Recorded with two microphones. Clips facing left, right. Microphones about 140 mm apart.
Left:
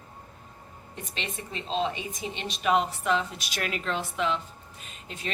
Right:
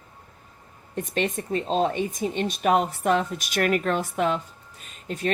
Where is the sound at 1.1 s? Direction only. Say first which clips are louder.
Right 11 dB; 50° right (ahead or behind).